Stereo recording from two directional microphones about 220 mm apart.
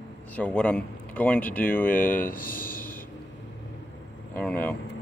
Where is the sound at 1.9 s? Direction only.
40° left (ahead or behind).